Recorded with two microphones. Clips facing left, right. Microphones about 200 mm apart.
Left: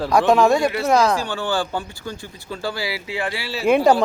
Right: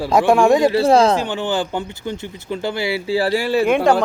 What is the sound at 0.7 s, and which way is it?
Speech, 30° right (ahead or behind).